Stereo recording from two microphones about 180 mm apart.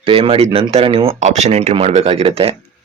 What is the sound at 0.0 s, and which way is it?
Speech, 30° right (ahead or behind).